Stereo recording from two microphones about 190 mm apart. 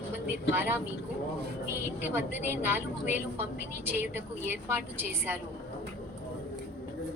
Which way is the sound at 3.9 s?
10° right (ahead or behind).